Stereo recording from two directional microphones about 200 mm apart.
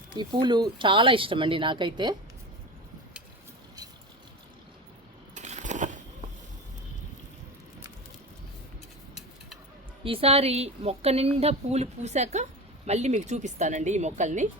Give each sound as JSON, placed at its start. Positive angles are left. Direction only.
{"t": 0.1, "sound": "speech", "side_deg": -20}
{"t": 5.3, "sound": "coin", "side_deg": -35}
{"t": 10.0, "sound": "a woman's voice", "side_deg": -30}